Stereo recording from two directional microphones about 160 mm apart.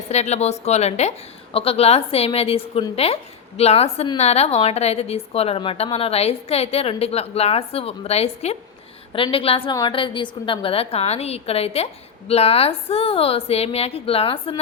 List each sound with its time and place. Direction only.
0.1 s a woman's voice: 45° left (ahead or behind)